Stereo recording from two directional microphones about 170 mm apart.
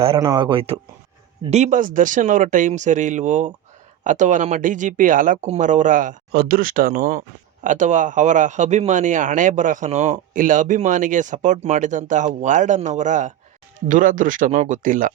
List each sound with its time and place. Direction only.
0.0 s a man's voice: 30° right (ahead or behind); by 15.1 s 50° right (ahead or behind)